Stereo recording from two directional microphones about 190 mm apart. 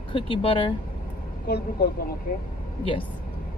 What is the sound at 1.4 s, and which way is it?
A woman's voice, 55° left (ahead or behind).